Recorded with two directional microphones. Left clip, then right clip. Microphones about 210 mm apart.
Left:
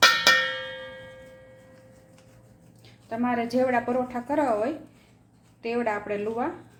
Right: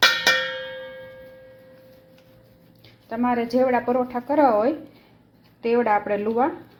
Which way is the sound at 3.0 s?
25° right (ahead or behind).